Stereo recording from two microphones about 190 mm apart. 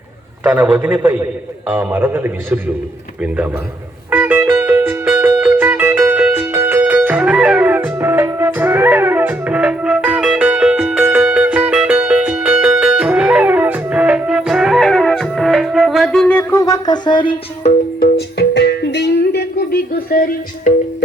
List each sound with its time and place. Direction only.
0.4 s a man's voice: 5° right (ahead or behind)
4.1 s music: 10° right (ahead or behind); by 17.7 s 25° left (ahead or behind)
17.7 s music: 55° left (ahead or behind)